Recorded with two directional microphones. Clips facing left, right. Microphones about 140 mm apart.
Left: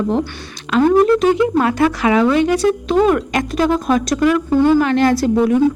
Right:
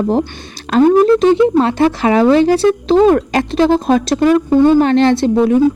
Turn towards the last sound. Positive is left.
turn(degrees=-25)  # may be behind; listen again after turning